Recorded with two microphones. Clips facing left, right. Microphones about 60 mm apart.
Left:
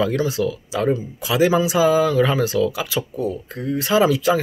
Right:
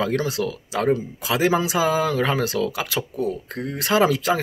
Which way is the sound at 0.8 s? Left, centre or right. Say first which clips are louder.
Even; right.